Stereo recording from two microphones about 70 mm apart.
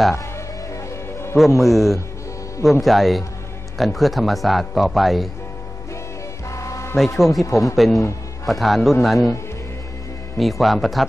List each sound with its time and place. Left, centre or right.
1.3 s a man's voice: centre
6.5 s music: left
7.2 s a man's voice: centre
7.4 s speech: left
7.7 s a man's voice: centre
10.3 s a man's voice: centre